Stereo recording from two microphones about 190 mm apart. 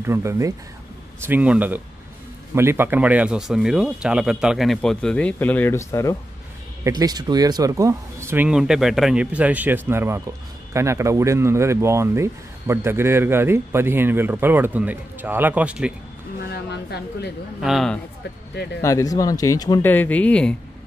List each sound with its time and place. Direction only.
0.0 s speech: 15° right (ahead or behind); by 6.1 s 15° left (ahead or behind)
6.8 s speech: 20° right (ahead or behind)
16.4 s speech: 60° left (ahead or behind)
17.6 s speech: centre (ahead or behind)
18.5 s speech: 65° left (ahead or behind)
18.8 s speech: 15° left (ahead or behind)